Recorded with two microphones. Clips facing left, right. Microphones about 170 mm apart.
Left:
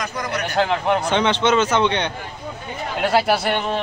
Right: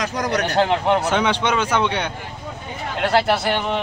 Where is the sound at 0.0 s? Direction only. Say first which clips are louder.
Right 4 dB; 90° right.